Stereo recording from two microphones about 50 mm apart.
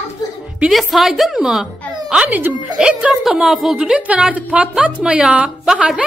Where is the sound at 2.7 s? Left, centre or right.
Centre.